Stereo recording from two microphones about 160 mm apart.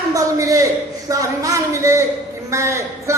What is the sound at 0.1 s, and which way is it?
A man's voice, 20° right (ahead or behind).